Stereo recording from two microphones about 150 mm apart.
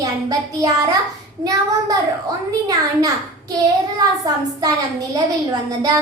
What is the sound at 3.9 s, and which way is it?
A woman's voice, 25° right (ahead or behind).